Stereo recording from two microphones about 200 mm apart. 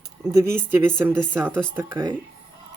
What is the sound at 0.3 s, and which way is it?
Speech, 15° right (ahead or behind).